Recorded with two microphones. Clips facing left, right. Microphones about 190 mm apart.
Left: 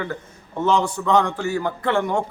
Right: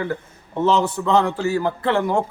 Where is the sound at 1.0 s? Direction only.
30° right (ahead or behind).